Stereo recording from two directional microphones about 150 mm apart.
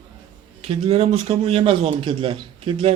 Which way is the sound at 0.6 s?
40° right (ahead or behind).